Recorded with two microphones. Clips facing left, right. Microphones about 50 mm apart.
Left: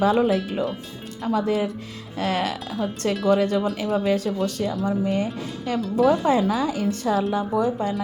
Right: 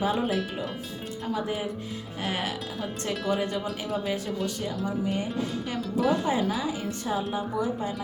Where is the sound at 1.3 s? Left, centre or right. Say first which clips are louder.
Left 9 dB; left.